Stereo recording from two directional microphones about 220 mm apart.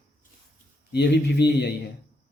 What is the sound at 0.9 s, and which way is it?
Speech, 50° left (ahead or behind).